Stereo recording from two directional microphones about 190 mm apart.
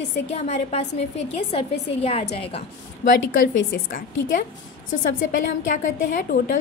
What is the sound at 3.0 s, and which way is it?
A woman's voice, 45° left (ahead or behind).